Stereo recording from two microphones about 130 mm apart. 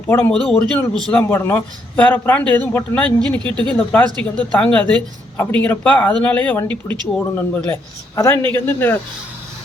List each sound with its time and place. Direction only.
0.1 s a man's voice: 10° left (ahead or behind)